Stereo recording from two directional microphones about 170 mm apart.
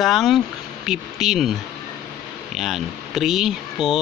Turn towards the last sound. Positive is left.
turn(degrees=0)  # may be behind; listen again after turning